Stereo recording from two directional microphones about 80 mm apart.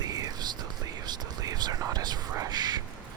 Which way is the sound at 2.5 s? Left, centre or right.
Right.